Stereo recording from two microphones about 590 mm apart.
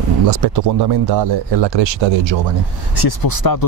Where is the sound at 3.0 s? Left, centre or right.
Left.